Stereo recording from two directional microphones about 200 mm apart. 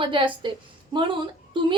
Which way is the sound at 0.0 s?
25° right (ahead or behind).